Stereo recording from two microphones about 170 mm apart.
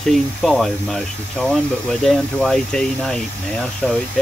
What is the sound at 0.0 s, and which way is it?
Speech, 5° left (ahead or behind).